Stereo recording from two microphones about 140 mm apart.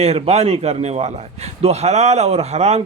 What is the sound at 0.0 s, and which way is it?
A man's voice, 50° right (ahead or behind).